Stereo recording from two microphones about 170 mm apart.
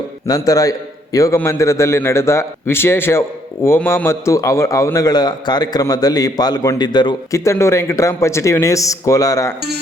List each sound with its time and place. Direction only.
0.3 s a man's voice: 20° left (ahead or behind)